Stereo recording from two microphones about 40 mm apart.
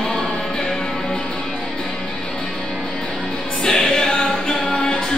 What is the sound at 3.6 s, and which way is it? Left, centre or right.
Music, centre.